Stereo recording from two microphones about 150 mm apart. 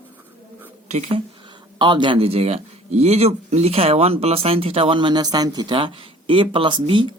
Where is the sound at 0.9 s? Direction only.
45° right (ahead or behind).